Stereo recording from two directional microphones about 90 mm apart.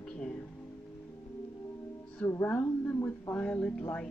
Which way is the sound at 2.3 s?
25° left (ahead or behind).